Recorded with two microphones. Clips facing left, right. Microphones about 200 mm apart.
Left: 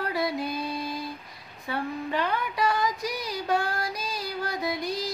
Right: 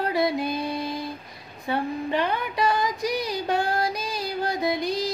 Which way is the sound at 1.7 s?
20° right (ahead or behind).